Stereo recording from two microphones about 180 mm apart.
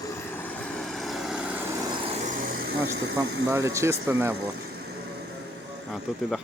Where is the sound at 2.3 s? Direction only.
50° right (ahead or behind).